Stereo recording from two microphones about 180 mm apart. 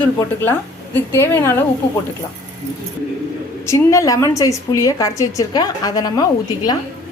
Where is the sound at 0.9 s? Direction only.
15° left (ahead or behind).